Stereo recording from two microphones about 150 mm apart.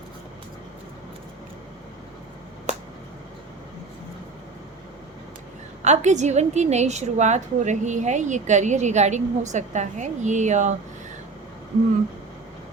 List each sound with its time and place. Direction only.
5.8 s a woman's voice: 50° right (ahead or behind)